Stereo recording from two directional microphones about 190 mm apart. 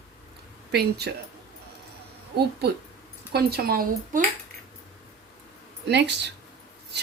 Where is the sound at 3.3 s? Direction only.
55° right (ahead or behind).